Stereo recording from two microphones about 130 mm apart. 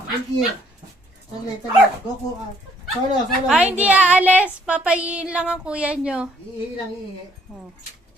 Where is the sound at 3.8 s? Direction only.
10° right (ahead or behind).